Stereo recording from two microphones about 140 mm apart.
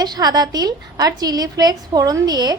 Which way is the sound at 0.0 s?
30° right (ahead or behind).